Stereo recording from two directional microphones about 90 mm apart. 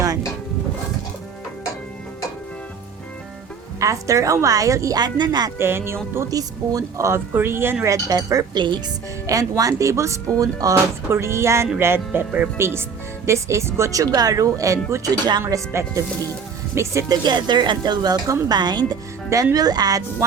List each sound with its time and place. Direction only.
3.8 s speech: 35° right (ahead or behind)
4.9 s speech: 55° right (ahead or behind)
5.5 s speech: 30° right (ahead or behind)
6.3 s speech: 40° right (ahead or behind); by 7.9 s 25° right (ahead or behind)
7.9 s speech: 40° right (ahead or behind)
17.2 s speech: 55° right (ahead or behind)